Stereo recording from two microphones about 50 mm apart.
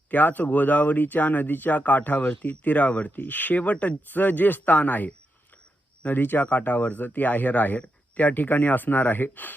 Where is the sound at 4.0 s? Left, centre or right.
Left.